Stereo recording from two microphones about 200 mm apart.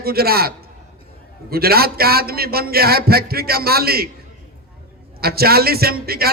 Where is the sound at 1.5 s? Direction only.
50° right (ahead or behind).